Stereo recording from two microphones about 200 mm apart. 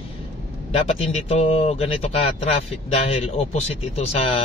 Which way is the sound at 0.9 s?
30° left (ahead or behind).